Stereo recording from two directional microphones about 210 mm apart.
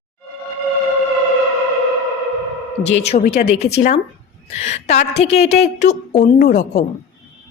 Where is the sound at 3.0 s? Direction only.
35° left (ahead or behind).